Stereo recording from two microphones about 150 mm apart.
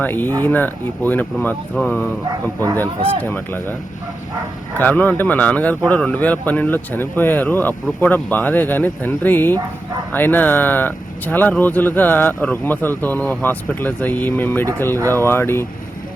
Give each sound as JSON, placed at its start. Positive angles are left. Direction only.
{"t": 0.0, "sound": "speech", "side_deg": 15}
{"t": 3.2, "sound": "speech", "side_deg": 15}
{"t": 4.8, "sound": "speech", "side_deg": 10}